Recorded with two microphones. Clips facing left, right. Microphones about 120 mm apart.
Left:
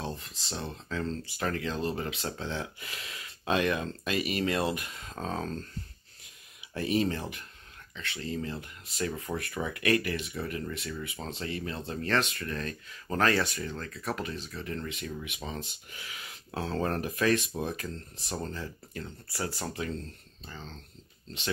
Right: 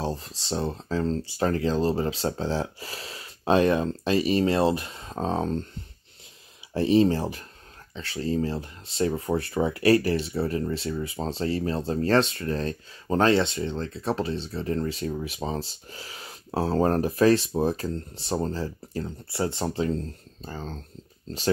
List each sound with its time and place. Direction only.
0.0 s speech: 35° right (ahead or behind)
6.7 s speech: 30° right (ahead or behind)
20.4 s speech: 45° right (ahead or behind)